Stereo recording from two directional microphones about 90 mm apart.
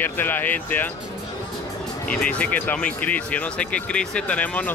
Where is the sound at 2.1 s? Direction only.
15° left (ahead or behind).